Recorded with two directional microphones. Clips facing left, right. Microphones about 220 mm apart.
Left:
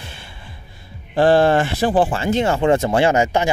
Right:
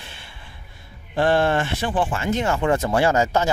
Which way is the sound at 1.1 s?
35° left (ahead or behind).